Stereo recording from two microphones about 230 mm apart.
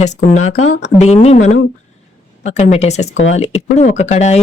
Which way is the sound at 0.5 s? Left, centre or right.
Left.